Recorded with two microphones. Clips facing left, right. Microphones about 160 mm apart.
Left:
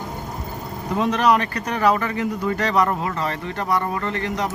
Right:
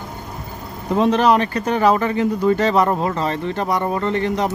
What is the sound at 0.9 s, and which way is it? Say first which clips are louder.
Speech: right 4 dB; 30° right (ahead or behind).